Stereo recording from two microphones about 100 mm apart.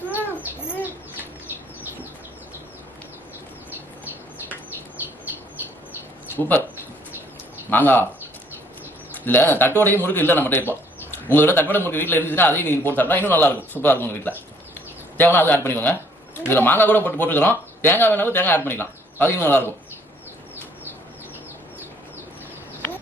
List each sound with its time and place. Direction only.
0.4 s bird: 15° right (ahead or behind)
7.7 s speech: 20° left (ahead or behind)
9.2 s speech: 20° left (ahead or behind)
22.8 s a sound: 20° left (ahead or behind)